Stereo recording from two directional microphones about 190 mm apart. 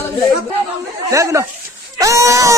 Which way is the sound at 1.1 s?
15° right (ahead or behind).